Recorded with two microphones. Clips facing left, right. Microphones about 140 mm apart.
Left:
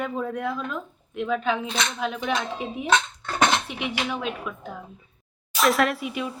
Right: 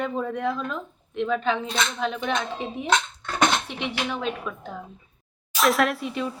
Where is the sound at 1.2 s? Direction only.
5° left (ahead or behind).